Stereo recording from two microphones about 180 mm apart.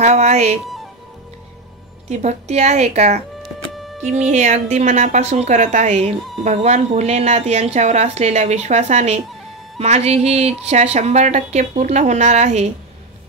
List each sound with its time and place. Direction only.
0.0 s a woman's voice: 40° right (ahead or behind)
2.0 s a woman's voice: 40° right (ahead or behind)
3.7 s music: centre (ahead or behind)
4.1 s a woman's voice: 40° right (ahead or behind)